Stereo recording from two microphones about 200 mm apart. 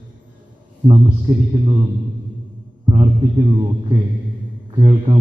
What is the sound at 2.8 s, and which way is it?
A man's voice, 25° right (ahead or behind).